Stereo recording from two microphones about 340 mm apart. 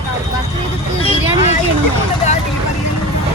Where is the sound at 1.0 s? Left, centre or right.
Centre.